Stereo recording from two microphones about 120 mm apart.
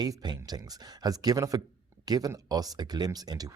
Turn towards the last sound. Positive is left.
turn(degrees=-30)  # may be behind; listen again after turning